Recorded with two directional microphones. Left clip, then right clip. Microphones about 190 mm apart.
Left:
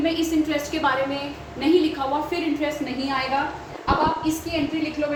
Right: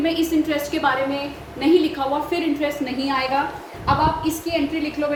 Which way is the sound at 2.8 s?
40° right (ahead or behind).